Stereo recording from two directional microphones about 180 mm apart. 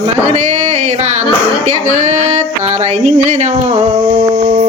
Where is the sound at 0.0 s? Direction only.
40° right (ahead or behind).